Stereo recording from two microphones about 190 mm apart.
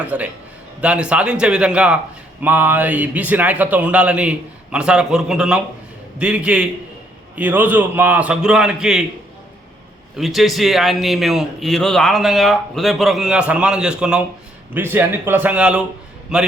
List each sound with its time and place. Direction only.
0.0 s a man's voice: 5° right (ahead or behind)
10.2 s a man's voice: centre (ahead or behind)